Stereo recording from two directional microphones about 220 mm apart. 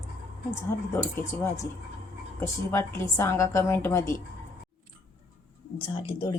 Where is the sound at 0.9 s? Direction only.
10° left (ahead or behind).